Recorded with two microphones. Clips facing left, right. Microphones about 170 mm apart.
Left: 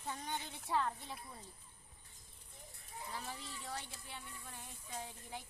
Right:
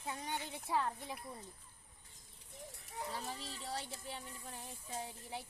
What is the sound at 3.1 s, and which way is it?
Speech, 35° right (ahead or behind).